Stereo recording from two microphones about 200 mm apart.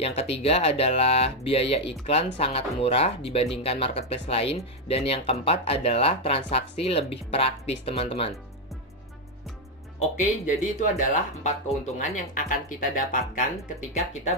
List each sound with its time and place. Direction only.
0.0 s speech: 30° left (ahead or behind)
9.9 s speech: 35° left (ahead or behind)